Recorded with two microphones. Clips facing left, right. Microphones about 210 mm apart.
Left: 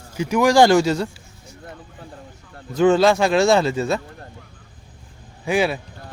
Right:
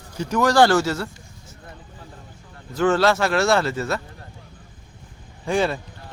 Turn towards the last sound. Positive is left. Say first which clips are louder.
# left 2 dB
turn(degrees=10)  # may be behind; listen again after turning